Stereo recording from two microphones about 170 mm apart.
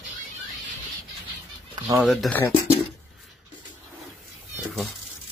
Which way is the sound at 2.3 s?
20° left (ahead or behind).